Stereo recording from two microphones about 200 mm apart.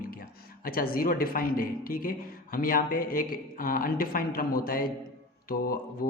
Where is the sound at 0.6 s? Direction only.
45° left (ahead or behind).